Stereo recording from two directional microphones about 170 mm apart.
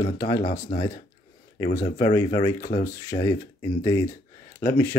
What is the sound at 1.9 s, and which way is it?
Speech, 20° left (ahead or behind).